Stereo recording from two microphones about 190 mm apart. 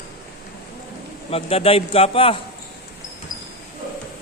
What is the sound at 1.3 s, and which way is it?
A man's voice, 30° left (ahead or behind).